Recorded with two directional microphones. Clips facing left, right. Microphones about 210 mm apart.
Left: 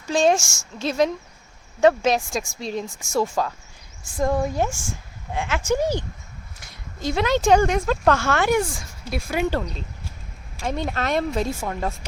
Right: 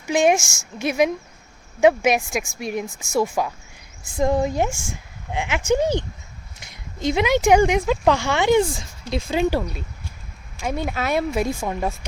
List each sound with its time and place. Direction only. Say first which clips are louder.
0.1 s speech: right 1 dB; 15° right (ahead or behind)
9.5 s speech: right 2 dB; 10° right (ahead or behind)